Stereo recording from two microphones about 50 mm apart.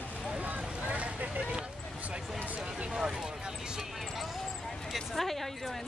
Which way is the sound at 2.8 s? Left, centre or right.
Centre.